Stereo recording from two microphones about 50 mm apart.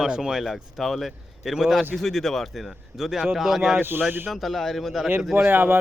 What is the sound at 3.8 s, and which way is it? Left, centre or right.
Speech, right.